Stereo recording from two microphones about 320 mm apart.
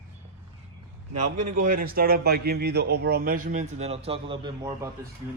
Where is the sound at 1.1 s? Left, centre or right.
Right.